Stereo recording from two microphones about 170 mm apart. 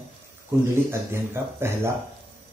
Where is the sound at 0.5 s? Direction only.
15° right (ahead or behind).